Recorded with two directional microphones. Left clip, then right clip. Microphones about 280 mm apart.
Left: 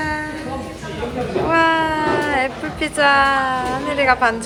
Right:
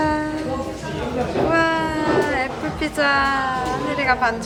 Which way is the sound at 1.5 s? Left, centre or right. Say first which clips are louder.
Left 5 dB; centre.